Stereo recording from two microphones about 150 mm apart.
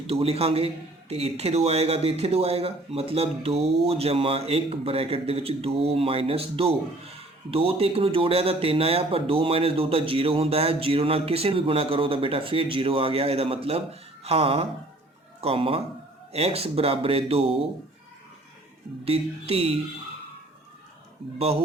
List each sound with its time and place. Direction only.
0.1 s a man's voice: 40° right (ahead or behind)
19.0 s a man's voice: 40° right (ahead or behind)
21.3 s a man's voice: 40° right (ahead or behind)